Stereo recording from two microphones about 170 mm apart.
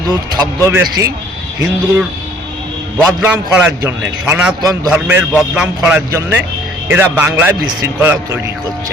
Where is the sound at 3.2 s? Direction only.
10° right (ahead or behind).